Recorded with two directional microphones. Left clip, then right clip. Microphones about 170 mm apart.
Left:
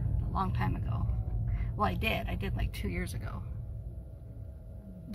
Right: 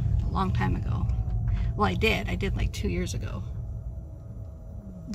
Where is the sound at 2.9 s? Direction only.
15° right (ahead or behind).